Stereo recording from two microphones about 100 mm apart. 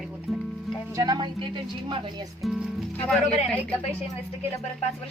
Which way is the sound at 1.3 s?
55° right (ahead or behind).